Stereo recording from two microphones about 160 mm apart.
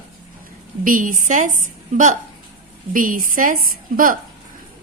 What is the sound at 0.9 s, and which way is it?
A woman's voice, 55° right (ahead or behind).